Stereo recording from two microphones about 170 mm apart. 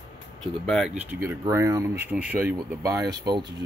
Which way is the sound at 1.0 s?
15° right (ahead or behind).